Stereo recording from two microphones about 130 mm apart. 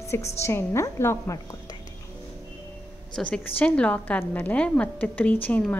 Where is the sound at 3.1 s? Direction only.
10° left (ahead or behind).